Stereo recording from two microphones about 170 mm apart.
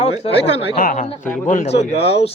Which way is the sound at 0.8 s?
50° left (ahead or behind).